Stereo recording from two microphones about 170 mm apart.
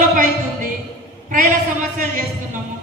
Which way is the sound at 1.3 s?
50° right (ahead or behind).